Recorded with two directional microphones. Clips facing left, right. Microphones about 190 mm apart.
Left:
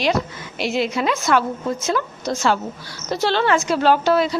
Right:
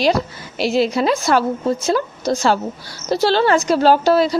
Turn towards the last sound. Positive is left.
turn(degrees=-35)  # may be behind; listen again after turning